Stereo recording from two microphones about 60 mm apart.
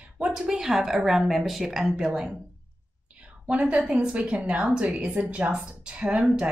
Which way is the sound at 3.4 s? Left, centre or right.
Centre.